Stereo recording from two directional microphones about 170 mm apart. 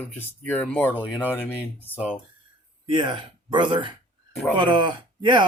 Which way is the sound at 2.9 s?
30° right (ahead or behind).